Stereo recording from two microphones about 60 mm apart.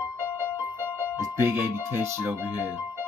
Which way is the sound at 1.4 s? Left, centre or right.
Right.